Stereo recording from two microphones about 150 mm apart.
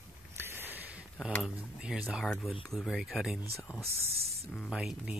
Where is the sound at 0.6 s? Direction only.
10° right (ahead or behind).